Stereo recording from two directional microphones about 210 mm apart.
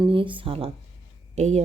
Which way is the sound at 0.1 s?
25° right (ahead or behind).